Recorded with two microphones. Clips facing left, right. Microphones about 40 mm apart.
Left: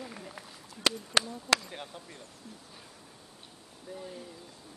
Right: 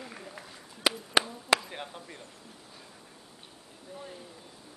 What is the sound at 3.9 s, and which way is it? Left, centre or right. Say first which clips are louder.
Speech: left 2 dB; centre.